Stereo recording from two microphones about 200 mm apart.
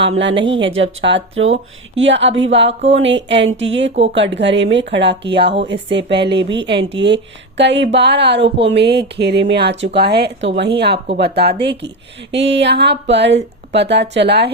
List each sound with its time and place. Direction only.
0.1 s speech: 65° right (ahead or behind)
0.3 s a woman's voice: 25° right (ahead or behind)
0.8 s speech: 70° right (ahead or behind)